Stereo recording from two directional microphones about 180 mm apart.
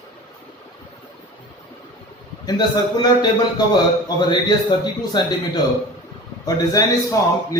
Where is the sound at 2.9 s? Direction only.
20° left (ahead or behind).